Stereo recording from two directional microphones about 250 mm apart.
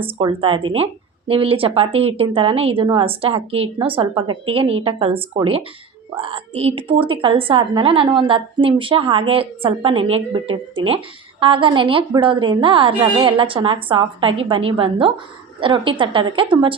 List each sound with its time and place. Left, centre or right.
0.0 s a woman's voice: right